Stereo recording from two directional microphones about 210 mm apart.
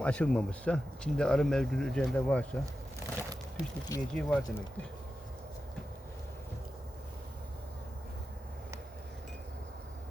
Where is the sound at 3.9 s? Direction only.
15° left (ahead or behind).